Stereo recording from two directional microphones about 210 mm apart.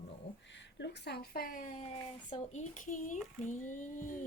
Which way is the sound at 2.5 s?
35° left (ahead or behind).